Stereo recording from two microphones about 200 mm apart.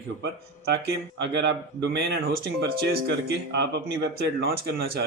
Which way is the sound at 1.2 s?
60° right (ahead or behind).